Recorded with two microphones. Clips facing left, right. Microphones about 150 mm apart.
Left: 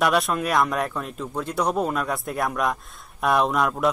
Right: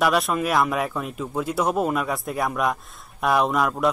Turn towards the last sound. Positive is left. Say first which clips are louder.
# even
turn(degrees=0)  # may be behind; listen again after turning